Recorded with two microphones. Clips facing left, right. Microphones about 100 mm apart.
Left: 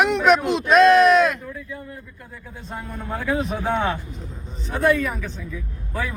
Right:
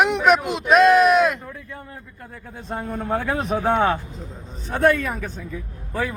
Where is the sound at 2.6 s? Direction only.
50° right (ahead or behind).